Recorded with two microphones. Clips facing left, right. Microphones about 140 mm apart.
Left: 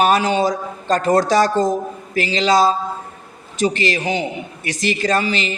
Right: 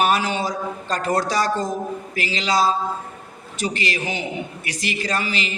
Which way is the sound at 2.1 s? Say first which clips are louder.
Left 6 dB; 30° left (ahead or behind).